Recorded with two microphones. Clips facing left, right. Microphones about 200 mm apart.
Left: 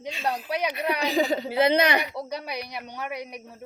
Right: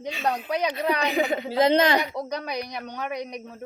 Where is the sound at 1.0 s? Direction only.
35° left (ahead or behind).